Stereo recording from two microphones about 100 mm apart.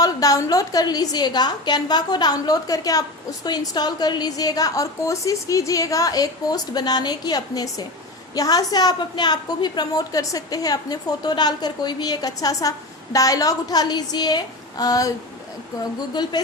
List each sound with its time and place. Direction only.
0.0 s a woman's voice: 35° left (ahead or behind)